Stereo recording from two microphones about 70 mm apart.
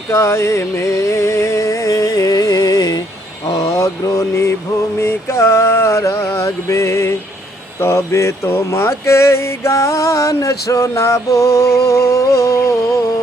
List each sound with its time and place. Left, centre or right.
0.1 s music: left
3.4 s mantra: left
4.9 s a sound: left